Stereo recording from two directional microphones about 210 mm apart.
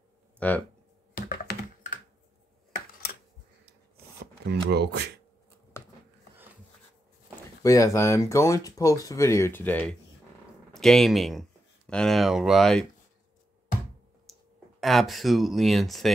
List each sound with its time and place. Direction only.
0.4 s speech: 5° left (ahead or behind)
1.1 s computer keyboard: 40° left (ahead or behind)
4.5 s speech: 50° right (ahead or behind)
7.6 s speech: 15° left (ahead or behind)
14.8 s speech: centre (ahead or behind)